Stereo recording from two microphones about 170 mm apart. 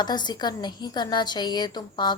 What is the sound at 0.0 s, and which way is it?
A woman's voice, 25° left (ahead or behind).